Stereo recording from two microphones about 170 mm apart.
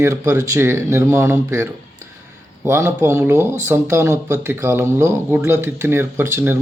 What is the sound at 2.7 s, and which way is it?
Speech, 15° right (ahead or behind).